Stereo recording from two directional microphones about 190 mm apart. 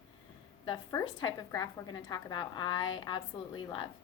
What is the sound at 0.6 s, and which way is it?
A woman's voice, 20° left (ahead or behind).